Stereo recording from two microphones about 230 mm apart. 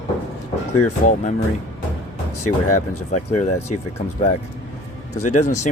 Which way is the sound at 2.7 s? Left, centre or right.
Left.